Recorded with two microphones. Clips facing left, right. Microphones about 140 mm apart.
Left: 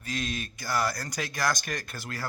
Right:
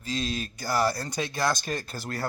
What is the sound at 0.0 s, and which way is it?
Speech, 25° right (ahead or behind).